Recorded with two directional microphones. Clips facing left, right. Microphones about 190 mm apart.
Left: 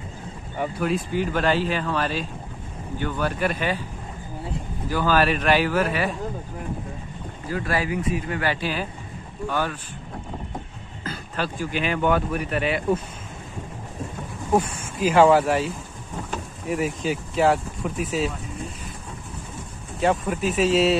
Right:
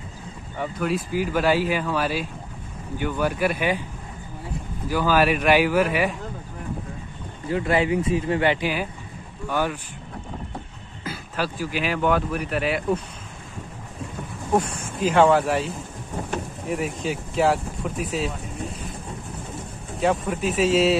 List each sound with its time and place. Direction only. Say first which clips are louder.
0.7 s speech: right 1 dB; centre (ahead or behind)
4.8 s speech: right 1 dB; 10° right (ahead or behind)
7.4 s speech: right 4 dB; 25° right (ahead or behind)
11.1 s speech: right 1 dB; 5° right (ahead or behind)
15.0 s speech: left 1 dB; 5° left (ahead or behind)
20.0 s speech: even; centre (ahead or behind)